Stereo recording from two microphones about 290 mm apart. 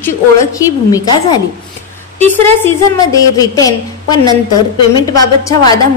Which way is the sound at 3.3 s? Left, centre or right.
Centre.